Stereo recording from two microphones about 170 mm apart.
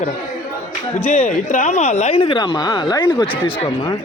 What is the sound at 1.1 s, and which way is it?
A man's voice, 45° left (ahead or behind).